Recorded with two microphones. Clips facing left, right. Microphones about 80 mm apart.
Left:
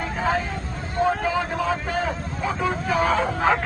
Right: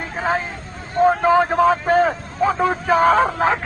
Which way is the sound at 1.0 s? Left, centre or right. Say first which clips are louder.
Right 8 dB; right.